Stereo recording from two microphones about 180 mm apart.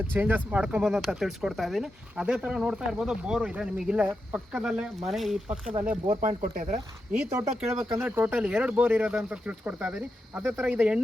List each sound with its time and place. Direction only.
0.1 s speech: 10° right (ahead or behind)
6.1 s speech: 40° right (ahead or behind)
6.7 s speech: 35° right (ahead or behind)
7.2 s speech: 10° right (ahead or behind)